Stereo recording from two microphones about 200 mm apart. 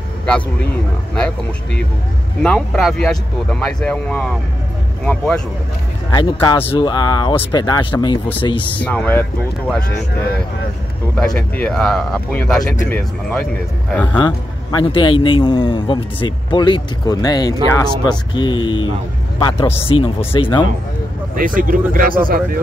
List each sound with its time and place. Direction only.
2.4 s speech: 5° left (ahead or behind)
6.1 s a man's voice: 20° left (ahead or behind)
8.7 s speech: 5° left (ahead or behind)
11.1 s speech: 5° left (ahead or behind)
14.1 s a man's voice: 25° left (ahead or behind)
19.9 s speech: 90° left
20.3 s a man's voice: 25° left (ahead or behind)
21.4 s speech: 45° right (ahead or behind)